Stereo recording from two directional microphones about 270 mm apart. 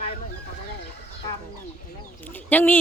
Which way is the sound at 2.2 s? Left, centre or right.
Centre.